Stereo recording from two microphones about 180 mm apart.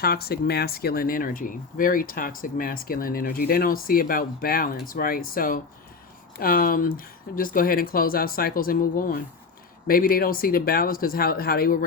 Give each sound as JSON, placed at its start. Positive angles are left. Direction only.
{"t": 0.0, "sound": "speech", "side_deg": 60}